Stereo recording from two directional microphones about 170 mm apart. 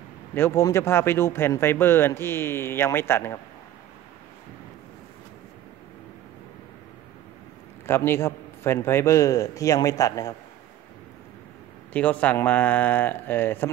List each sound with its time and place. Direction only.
0.3 s speech: 15° left (ahead or behind)
7.8 s speech: 15° left (ahead or behind)
11.9 s speech: 10° left (ahead or behind)